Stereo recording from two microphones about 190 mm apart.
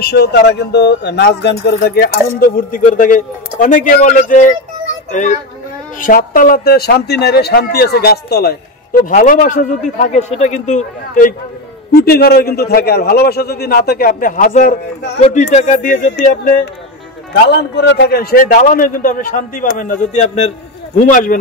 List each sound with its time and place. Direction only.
0.0 s a man's voice: 60° left (ahead or behind); by 11.3 s 40° left (ahead or behind)
11.9 s a man's voice: 55° left (ahead or behind); by 16.5 s 40° left (ahead or behind)
17.3 s a man's voice: 65° left (ahead or behind); by 21.4 s 45° left (ahead or behind)